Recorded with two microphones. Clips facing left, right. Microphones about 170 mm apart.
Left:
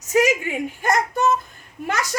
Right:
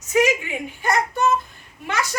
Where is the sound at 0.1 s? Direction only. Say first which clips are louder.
Left 1 dB; 40° left (ahead or behind).